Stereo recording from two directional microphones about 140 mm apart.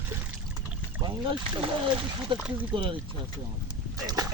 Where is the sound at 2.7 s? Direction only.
40° right (ahead or behind).